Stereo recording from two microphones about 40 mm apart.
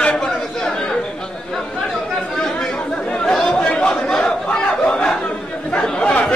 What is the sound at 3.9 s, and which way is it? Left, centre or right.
Chatter, centre.